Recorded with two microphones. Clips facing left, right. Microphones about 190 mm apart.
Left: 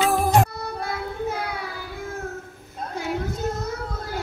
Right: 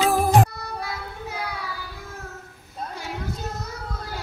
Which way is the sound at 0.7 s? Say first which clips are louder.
Left 4 dB; 50° left (ahead or behind).